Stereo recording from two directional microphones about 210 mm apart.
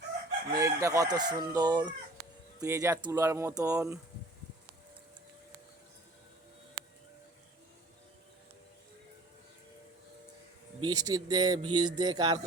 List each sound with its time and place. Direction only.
0.5 s chicken: 15° right (ahead or behind)
3.8 s speech: 5° right (ahead or behind)
10.8 s speech: 20° right (ahead or behind)